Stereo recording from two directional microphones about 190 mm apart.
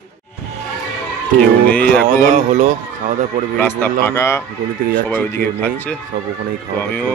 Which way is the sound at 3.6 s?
10° left (ahead or behind).